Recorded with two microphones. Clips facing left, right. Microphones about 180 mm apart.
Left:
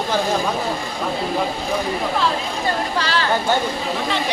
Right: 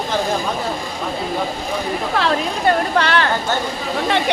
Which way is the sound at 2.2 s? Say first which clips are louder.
Right 3 dB; 70° right (ahead or behind).